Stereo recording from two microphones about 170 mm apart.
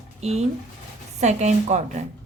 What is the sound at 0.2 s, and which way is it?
A woman's voice, 40° right (ahead or behind).